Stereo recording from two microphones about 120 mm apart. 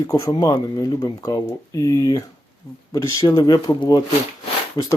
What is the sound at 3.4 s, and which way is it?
Speech, 35° left (ahead or behind).